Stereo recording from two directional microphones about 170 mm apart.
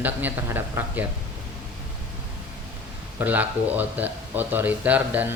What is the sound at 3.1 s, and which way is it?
Speech, 10° right (ahead or behind).